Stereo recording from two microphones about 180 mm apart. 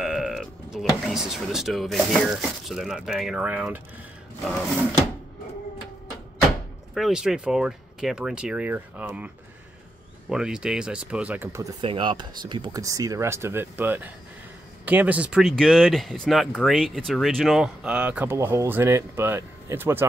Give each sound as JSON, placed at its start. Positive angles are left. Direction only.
{"t": 0.0, "sound": "a sound", "side_deg": 0}
{"t": 1.0, "sound": "speech", "side_deg": 0}
{"t": 6.9, "sound": "speech", "side_deg": 0}
{"t": 10.3, "sound": "speech", "side_deg": -5}
{"t": 11.8, "sound": "speech", "side_deg": -25}